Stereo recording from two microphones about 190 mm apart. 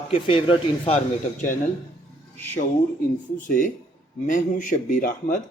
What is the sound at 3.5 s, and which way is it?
Speech, 45° left (ahead or behind).